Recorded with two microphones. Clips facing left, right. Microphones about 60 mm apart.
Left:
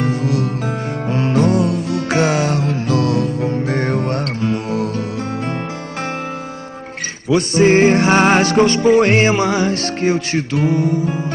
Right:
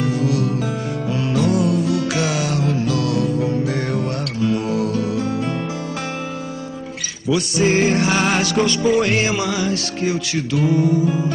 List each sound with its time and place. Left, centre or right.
0.0 s music: left
7.2 s music: left